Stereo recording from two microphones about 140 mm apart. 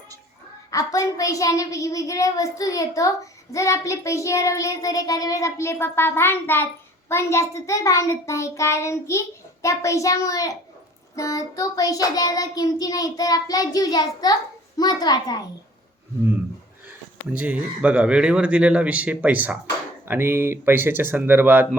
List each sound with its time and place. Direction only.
0.7 s a child's voice: 25° left (ahead or behind)
17.3 s speech: 10° right (ahead or behind)